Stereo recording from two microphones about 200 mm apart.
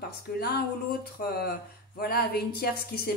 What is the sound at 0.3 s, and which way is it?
Speech, 50° left (ahead or behind).